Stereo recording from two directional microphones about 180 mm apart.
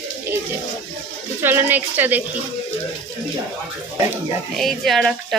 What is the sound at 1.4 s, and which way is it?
Speech, 10° right (ahead or behind).